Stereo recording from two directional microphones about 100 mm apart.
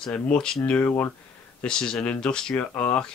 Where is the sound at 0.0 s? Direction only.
10° left (ahead or behind).